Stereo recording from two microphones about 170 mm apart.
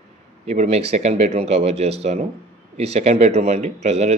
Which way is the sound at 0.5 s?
40° right (ahead or behind).